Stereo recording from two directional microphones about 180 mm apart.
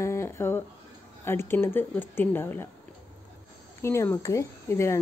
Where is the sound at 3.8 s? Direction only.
15° left (ahead or behind).